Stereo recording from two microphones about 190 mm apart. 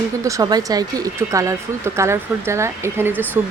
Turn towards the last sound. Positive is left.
turn(degrees=-10)  # may be behind; listen again after turning